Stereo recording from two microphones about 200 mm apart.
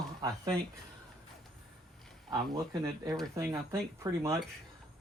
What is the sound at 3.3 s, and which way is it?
Speech, 15° right (ahead or behind).